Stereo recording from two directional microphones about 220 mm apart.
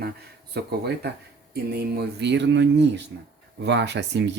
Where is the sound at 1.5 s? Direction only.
45° right (ahead or behind).